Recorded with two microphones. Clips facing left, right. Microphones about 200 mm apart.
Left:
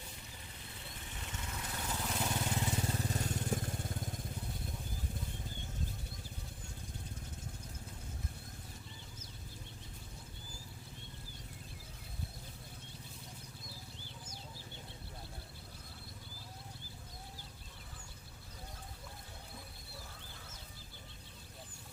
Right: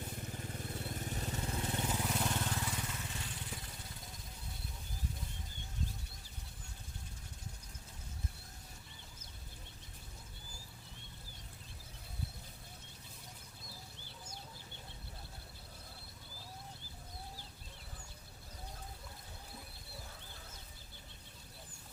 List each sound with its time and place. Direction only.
0.3 s vehicle: 50° right (ahead or behind); by 2.0 s 20° right (ahead or behind)
2.0 s vehicle: centre (ahead or behind)
2.6 s vehicle: 25° left (ahead or behind)
2.8 s vehicle: 35° left (ahead or behind)